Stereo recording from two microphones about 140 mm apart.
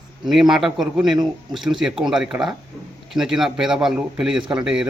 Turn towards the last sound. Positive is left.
turn(degrees=-5)  # may be behind; listen again after turning